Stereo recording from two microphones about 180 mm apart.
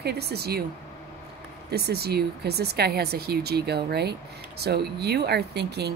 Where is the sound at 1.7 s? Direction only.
60° right (ahead or behind).